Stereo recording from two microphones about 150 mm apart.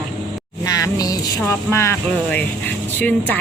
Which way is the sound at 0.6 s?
25° left (ahead or behind).